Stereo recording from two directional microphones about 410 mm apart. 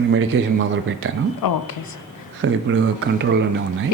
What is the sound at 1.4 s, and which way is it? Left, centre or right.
Speech, left.